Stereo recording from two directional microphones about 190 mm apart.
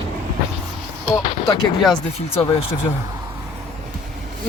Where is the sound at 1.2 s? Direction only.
20° left (ahead or behind).